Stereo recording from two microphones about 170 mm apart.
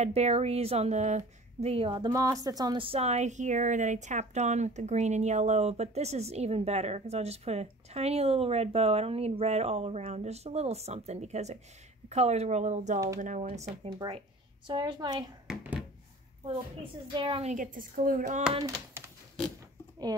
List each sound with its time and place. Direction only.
0.0 s a child's voice: 40° right (ahead or behind)
13.8 s a woman's voice: 25° right (ahead or behind)
17.1 s a child's voice: 30° right (ahead or behind); by 18.4 s 50° right (ahead or behind)